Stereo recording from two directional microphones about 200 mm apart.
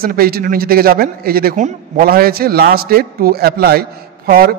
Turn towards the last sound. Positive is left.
turn(degrees=-50)  # may be behind; listen again after turning